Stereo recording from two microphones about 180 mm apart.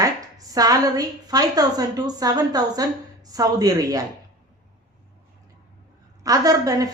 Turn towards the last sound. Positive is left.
turn(degrees=-20)  # may be behind; listen again after turning